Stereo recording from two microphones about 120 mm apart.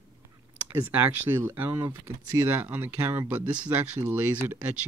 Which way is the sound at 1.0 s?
20° right (ahead or behind).